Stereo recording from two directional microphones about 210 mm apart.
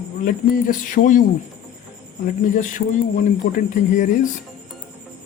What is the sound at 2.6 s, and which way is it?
Music, 40° left (ahead or behind).